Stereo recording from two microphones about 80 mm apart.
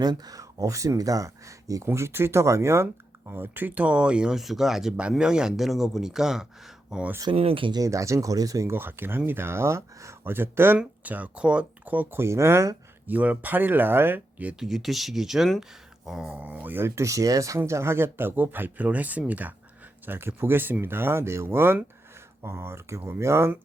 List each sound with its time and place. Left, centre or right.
0.0 s speech: right; by 7.0 s centre
7.3 s speech: right
7.8 s speech: right
8.7 s speech: right
10.8 s speech: centre
12.2 s speech: right
13.1 s speech: centre
14.6 s speech: centre; by 23.5 s right